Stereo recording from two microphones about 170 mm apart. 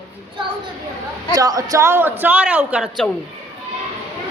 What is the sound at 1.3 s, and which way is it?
A woman's voice, 20° right (ahead or behind).